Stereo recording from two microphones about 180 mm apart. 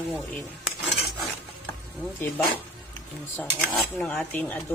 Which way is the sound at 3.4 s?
10° left (ahead or behind).